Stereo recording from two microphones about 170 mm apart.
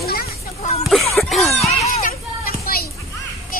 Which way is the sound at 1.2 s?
Centre (ahead or behind).